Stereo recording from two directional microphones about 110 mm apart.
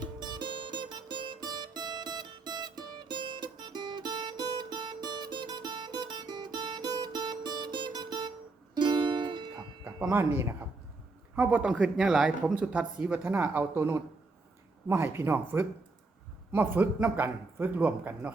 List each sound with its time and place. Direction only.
0.0 s music: 40° right (ahead or behind)
10.1 s speech: 25° right (ahead or behind)
11.3 s speech: 10° right (ahead or behind)